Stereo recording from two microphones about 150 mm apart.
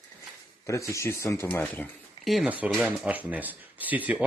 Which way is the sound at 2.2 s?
Centre (ahead or behind).